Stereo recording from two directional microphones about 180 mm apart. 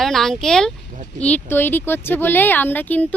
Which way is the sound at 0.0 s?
Centre (ahead or behind).